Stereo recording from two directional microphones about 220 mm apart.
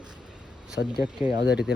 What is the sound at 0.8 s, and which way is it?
Speech, 55° left (ahead or behind).